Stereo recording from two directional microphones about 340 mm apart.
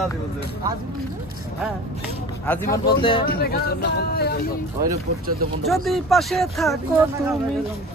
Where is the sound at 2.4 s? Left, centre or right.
Centre.